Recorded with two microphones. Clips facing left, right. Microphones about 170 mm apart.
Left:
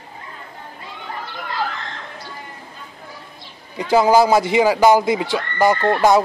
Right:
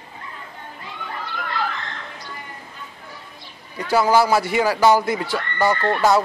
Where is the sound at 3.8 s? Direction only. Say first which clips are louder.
Left 3 dB; 15° left (ahead or behind).